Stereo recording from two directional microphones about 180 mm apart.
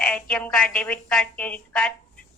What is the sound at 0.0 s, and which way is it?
A woman's voice, 5° left (ahead or behind).